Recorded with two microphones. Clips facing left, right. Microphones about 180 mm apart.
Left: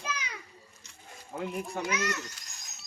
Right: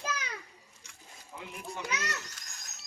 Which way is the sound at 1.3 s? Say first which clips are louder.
Left 8 dB; 50° left (ahead or behind).